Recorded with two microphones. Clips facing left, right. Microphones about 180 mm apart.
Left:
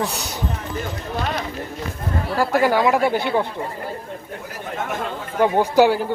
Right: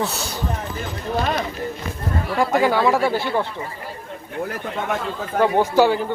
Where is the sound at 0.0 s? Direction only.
15° left (ahead or behind).